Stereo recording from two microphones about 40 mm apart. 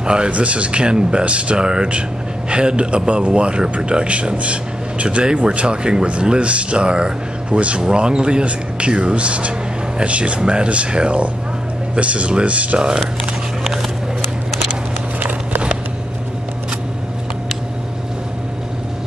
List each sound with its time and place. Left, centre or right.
0.0 s speech: right
15.1 s walk: right